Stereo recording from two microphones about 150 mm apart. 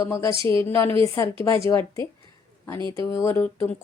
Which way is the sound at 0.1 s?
20° left (ahead or behind).